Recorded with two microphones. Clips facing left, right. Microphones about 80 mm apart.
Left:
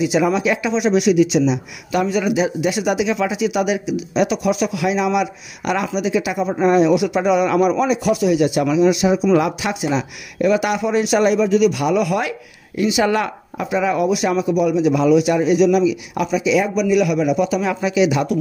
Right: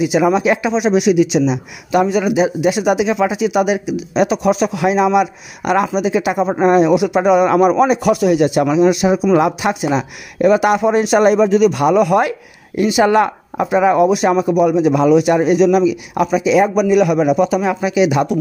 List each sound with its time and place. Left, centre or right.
0.0 s a man's voice: right
6.9 s a man's voice: right